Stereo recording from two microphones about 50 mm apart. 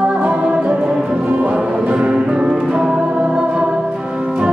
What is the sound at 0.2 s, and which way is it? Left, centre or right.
Music, right.